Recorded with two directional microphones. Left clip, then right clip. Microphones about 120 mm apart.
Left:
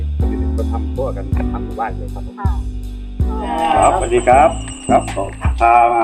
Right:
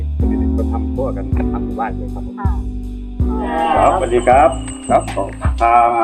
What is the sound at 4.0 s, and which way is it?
Music, 10° right (ahead or behind).